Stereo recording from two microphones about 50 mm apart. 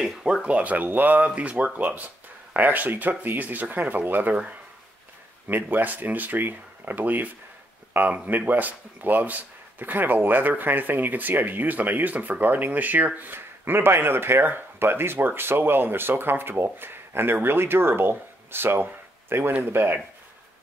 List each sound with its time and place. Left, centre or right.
0.2 s speech: centre; by 20.0 s right